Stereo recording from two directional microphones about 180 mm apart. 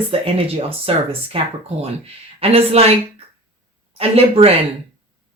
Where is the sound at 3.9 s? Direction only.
35° right (ahead or behind).